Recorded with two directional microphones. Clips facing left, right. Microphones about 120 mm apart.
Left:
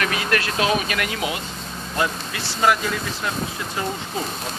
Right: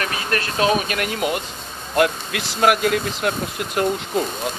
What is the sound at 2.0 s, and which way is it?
Speech, 65° right (ahead or behind).